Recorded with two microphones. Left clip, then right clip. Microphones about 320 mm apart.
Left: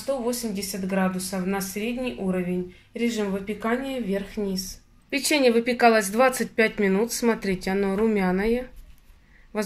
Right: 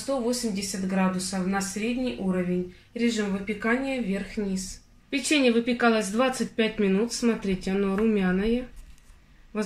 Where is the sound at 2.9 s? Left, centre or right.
Left.